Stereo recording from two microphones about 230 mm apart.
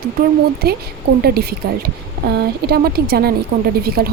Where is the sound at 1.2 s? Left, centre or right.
Right.